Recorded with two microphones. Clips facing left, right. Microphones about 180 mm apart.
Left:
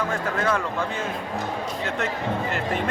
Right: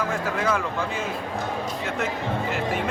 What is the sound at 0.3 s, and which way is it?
Speech, 5° right (ahead or behind).